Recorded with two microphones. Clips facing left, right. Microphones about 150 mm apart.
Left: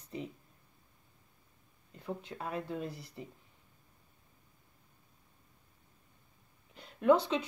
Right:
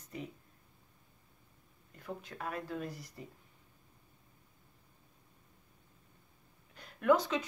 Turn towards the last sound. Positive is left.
turn(degrees=30)  # may be behind; listen again after turning